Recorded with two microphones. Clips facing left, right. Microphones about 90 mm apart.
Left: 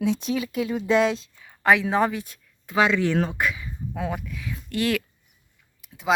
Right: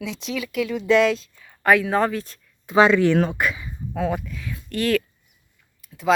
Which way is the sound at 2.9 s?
65° right (ahead or behind).